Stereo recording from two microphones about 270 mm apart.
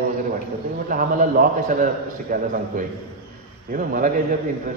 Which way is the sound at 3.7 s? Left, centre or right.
Right.